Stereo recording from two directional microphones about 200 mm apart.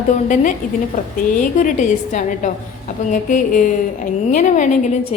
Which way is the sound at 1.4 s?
40° left (ahead or behind).